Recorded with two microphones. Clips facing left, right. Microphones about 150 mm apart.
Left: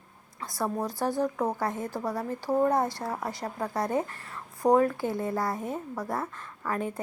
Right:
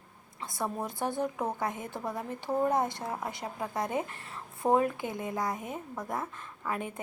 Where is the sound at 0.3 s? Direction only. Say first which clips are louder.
Left 4 dB; 20° right (ahead or behind).